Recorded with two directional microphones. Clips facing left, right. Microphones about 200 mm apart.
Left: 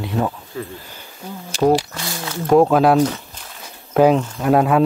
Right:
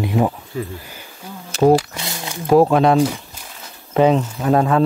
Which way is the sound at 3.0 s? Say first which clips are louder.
Even; 10° right (ahead or behind).